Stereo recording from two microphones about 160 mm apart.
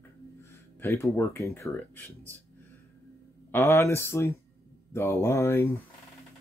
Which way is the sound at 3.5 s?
15° left (ahead or behind).